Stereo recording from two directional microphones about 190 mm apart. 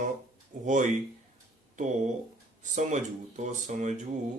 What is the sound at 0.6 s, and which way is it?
Speech, 40° right (ahead or behind).